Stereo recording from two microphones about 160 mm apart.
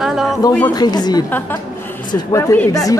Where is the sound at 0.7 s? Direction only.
25° left (ahead or behind).